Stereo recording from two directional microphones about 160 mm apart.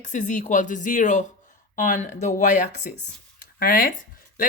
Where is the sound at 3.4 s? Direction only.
65° left (ahead or behind).